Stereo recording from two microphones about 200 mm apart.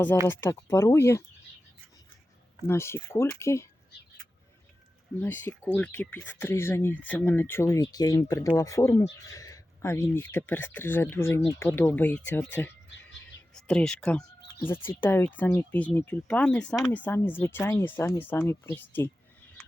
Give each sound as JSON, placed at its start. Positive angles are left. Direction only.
{"t": 0.3, "sound": "speech", "side_deg": 15}
{"t": 2.6, "sound": "speech", "side_deg": 10}
{"t": 5.2, "sound": "speech", "side_deg": 10}